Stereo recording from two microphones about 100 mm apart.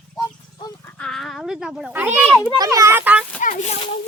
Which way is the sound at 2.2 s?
5° left (ahead or behind).